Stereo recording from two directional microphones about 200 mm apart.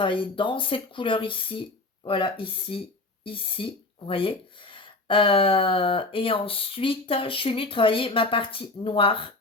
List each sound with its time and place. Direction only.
0.0 s speech: 25° left (ahead or behind)